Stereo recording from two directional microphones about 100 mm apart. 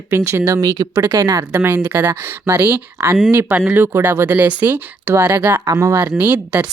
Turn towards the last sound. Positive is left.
turn(degrees=-20)  # may be behind; listen again after turning